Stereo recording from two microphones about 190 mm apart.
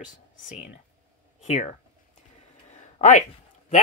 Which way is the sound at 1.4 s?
35° left (ahead or behind).